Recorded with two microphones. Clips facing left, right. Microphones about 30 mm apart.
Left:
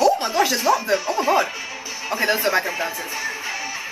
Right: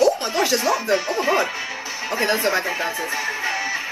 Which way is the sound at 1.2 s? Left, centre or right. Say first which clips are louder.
Left 1 dB; centre.